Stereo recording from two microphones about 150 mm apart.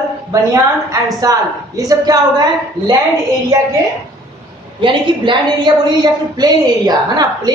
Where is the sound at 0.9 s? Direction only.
25° right (ahead or behind).